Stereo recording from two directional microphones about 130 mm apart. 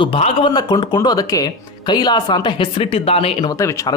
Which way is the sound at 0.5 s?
35° left (ahead or behind).